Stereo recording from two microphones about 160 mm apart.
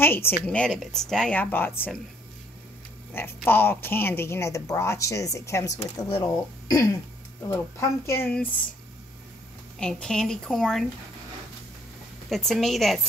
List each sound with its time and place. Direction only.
0.0 s speech: 15° left (ahead or behind)
3.1 s speech: 15° left (ahead or behind)
5.9 s speech: 30° left (ahead or behind)
7.4 s speech: 15° left (ahead or behind)
9.8 s a woman's voice: 5° left (ahead or behind)
12.3 s a woman's voice: centre (ahead or behind)